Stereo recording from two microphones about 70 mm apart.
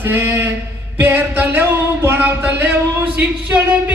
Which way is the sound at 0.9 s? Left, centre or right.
Right.